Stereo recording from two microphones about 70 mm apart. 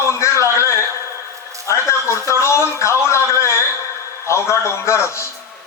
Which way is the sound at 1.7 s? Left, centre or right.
Left.